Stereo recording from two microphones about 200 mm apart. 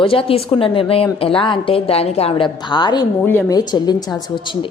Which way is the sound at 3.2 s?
10° left (ahead or behind).